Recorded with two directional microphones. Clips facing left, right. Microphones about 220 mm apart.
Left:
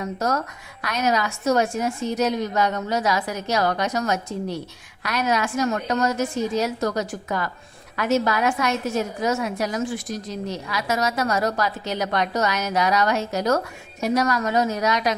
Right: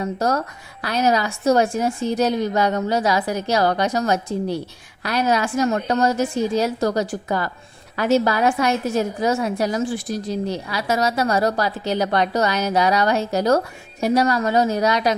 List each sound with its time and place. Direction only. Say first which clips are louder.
0.0 s a woman's voice: right 3 dB; 30° right (ahead or behind)